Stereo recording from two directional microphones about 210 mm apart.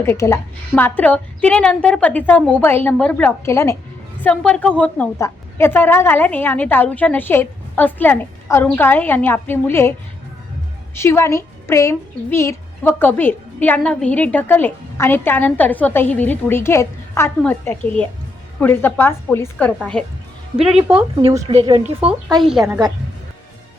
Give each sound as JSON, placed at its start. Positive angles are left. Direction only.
{"t": 0.0, "sound": "a woman's voice", "side_deg": 15}
{"t": 10.9, "sound": "a woman's voice", "side_deg": 10}
{"t": 20.6, "sound": "a woman's voice", "side_deg": -30}
{"t": 22.0, "sound": "a woman's voice", "side_deg": -5}
{"t": 22.6, "sound": "a woman's voice", "side_deg": -15}